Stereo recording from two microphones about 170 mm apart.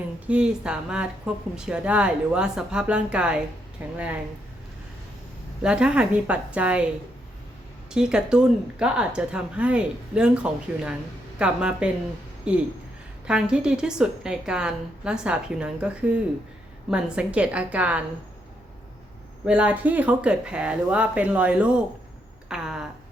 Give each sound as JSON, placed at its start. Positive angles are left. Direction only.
{"t": 0.3, "sound": "speech", "side_deg": -5}
{"t": 5.6, "sound": "speech", "side_deg": -5}
{"t": 7.9, "sound": "speech", "side_deg": -5}
{"t": 19.5, "sound": "speech", "side_deg": -5}
{"t": 22.4, "sound": "a sound", "side_deg": -5}